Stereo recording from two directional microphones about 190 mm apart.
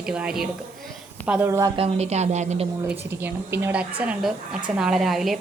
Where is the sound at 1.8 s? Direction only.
35° right (ahead or behind).